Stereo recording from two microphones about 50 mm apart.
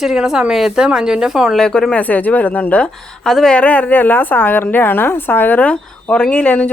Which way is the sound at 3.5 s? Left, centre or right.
Left.